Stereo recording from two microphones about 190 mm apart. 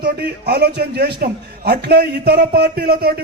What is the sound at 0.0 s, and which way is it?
A man's voice, 60° right (ahead or behind).